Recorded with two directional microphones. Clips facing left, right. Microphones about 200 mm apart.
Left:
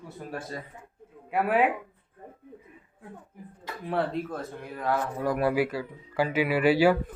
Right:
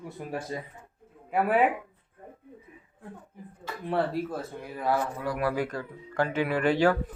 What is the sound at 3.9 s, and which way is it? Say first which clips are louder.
Speech: right 1 dB; 5° right (ahead or behind).